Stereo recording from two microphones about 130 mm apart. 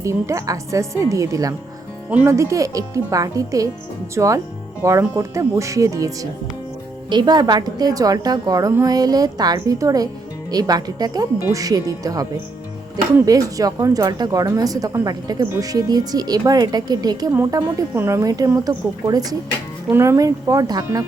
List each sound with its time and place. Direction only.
0.0 s a woman's voice: 25° right (ahead or behind)
2.0 s speech: 10° right (ahead or behind)
2.3 s a woman's voice: 25° right (ahead or behind)